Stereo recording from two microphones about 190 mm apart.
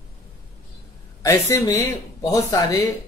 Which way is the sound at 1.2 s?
15° left (ahead or behind).